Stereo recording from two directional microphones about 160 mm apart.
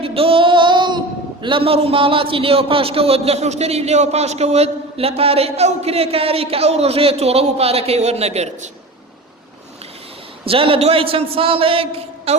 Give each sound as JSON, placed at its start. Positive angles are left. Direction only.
{"t": 0.0, "sound": "speech", "side_deg": -35}
{"t": 10.4, "sound": "speech", "side_deg": -35}